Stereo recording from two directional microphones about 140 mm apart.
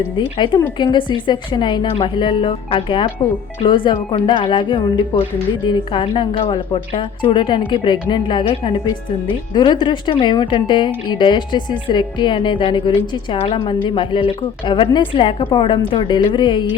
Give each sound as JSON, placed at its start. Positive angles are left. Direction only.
{"t": 0.2, "sound": "a woman's voice", "side_deg": 35}